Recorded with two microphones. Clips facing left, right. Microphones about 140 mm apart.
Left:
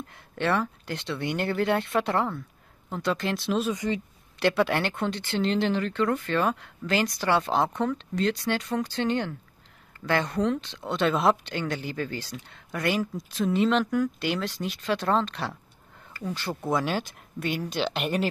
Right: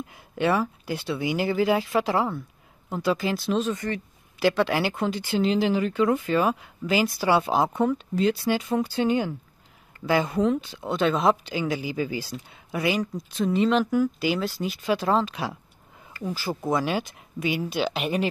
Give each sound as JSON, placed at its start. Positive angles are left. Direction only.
{"t": 0.0, "sound": "speech", "side_deg": -10}
{"t": 3.7, "sound": "speech", "side_deg": 15}
{"t": 4.4, "sound": "speech", "side_deg": 0}